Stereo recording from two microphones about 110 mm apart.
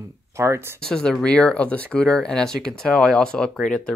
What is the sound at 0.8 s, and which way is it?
Speech, 5° left (ahead or behind).